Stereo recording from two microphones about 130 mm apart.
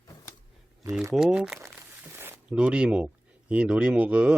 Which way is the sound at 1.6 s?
15° right (ahead or behind).